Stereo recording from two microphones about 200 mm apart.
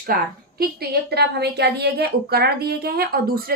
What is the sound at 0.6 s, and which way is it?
A woman's voice, 50° right (ahead or behind).